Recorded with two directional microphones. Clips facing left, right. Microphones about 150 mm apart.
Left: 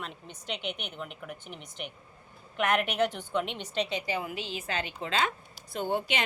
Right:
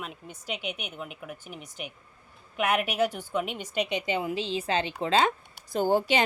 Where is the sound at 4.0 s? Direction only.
25° right (ahead or behind).